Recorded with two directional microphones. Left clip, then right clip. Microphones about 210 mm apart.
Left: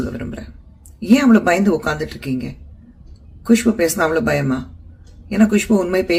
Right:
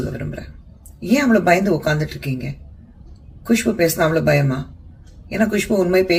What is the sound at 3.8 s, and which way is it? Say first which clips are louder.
Speech: even; 15° left (ahead or behind).